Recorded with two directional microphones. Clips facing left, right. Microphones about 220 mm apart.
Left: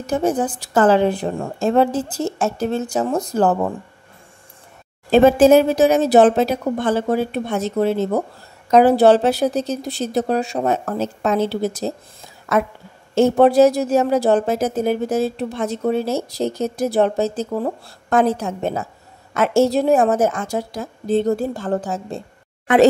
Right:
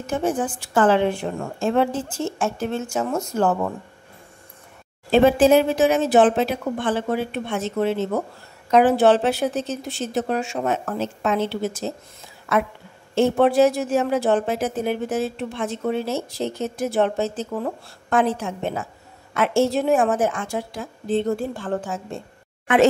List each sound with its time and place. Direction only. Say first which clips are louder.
0.0 s a woman's voice: left 4 dB; 40° left (ahead or behind)
5.1 s a woman's voice: left 4 dB; 45° left (ahead or behind)